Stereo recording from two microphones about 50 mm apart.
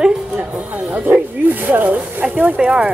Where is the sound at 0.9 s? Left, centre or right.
Right.